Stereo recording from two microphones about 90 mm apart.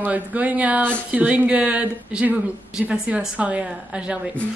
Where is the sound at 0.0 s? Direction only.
15° right (ahead or behind).